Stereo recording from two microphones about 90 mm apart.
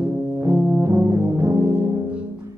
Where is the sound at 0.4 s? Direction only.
35° right (ahead or behind).